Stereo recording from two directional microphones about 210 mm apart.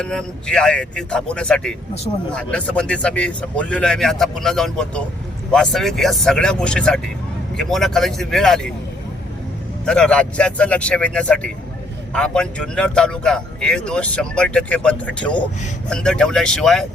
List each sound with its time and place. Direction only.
0.0 s speech: 5° left (ahead or behind)
9.8 s speech: 5° left (ahead or behind)